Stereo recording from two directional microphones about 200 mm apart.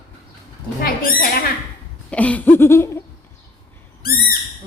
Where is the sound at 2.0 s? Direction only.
5° left (ahead or behind).